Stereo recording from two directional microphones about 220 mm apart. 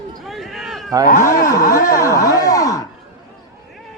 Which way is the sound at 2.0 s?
15° left (ahead or behind).